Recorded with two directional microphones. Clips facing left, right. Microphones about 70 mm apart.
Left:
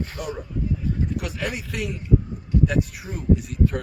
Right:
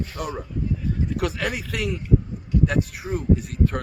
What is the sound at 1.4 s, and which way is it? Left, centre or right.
Speech, right.